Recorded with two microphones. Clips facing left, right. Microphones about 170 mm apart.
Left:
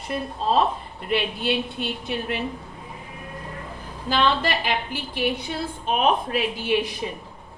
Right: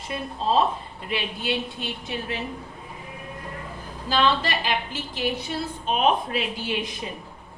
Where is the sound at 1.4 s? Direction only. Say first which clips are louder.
Left 3 dB; 60° left (ahead or behind).